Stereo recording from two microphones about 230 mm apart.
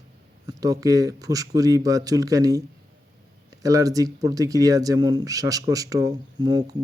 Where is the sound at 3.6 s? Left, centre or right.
Centre.